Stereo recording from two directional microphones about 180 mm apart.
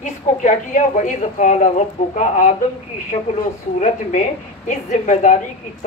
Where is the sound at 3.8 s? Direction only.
45° left (ahead or behind).